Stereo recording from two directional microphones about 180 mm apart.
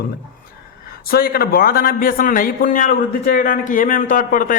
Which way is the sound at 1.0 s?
55° left (ahead or behind).